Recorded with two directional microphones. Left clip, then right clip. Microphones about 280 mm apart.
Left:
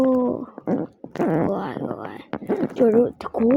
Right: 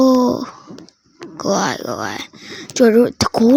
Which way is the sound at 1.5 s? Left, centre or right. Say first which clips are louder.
Right 8 dB; right.